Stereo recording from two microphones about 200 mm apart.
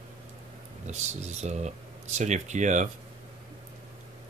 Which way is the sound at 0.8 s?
35° right (ahead or behind).